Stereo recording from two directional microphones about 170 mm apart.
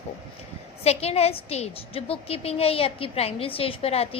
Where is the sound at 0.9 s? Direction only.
40° left (ahead or behind).